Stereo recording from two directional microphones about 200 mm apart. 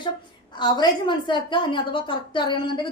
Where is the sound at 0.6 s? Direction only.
20° left (ahead or behind).